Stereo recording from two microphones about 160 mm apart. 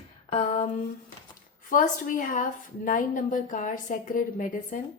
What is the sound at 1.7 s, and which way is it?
A woman's voice, 55° left (ahead or behind).